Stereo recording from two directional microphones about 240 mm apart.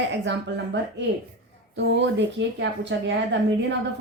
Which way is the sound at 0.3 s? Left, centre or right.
Right.